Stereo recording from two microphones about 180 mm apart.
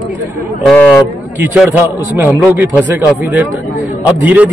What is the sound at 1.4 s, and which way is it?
A man's voice, 10° right (ahead or behind).